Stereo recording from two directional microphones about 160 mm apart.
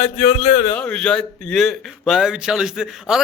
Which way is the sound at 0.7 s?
10° left (ahead or behind).